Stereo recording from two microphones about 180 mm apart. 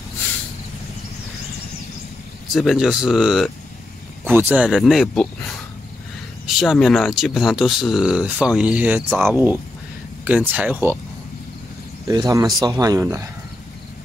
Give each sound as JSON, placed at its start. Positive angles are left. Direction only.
{"t": 2.5, "sound": "speech", "side_deg": 0}
{"t": 6.4, "sound": "speech", "side_deg": 0}
{"t": 12.1, "sound": "speech", "side_deg": -20}